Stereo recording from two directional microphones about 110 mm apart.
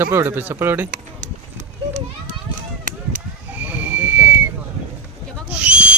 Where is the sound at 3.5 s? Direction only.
15° right (ahead or behind).